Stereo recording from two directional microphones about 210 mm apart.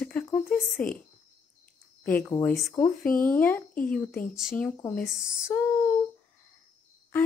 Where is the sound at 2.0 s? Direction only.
10° left (ahead or behind).